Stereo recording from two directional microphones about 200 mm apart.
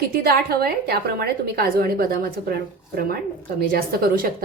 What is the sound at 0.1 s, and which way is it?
A woman's voice, 50° right (ahead or behind).